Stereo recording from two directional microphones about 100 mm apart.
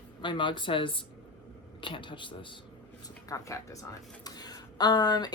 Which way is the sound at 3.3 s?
30° left (ahead or behind).